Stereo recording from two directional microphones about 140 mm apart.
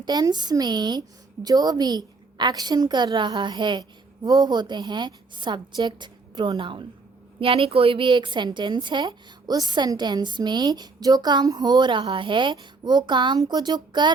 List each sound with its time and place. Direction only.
0.0 s a woman's voice: 30° right (ahead or behind)